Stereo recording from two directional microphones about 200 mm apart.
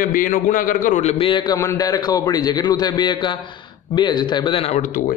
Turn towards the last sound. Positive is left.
turn(degrees=45)  # may be behind; listen again after turning